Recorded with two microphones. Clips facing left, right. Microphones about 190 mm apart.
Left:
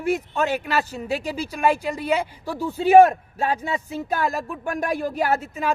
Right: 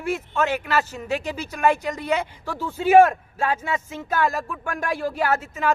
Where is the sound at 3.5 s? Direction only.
35° left (ahead or behind).